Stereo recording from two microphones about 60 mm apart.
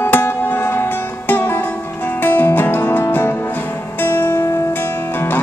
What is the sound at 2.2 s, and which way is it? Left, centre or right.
Music, left.